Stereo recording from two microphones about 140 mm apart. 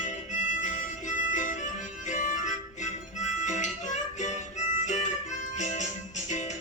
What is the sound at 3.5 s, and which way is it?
Music, 60° left (ahead or behind).